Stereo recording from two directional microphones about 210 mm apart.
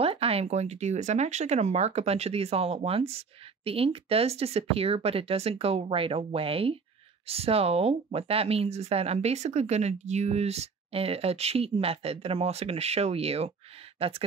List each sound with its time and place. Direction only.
0.0 s speech: 25° right (ahead or behind)